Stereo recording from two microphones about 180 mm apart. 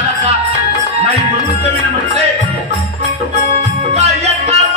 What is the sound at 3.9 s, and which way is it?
Music, 35° right (ahead or behind).